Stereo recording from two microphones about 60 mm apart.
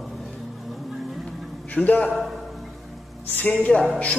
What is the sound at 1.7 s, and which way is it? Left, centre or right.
Speech, left.